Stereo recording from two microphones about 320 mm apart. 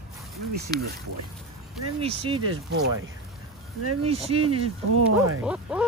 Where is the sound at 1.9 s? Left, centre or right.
Centre.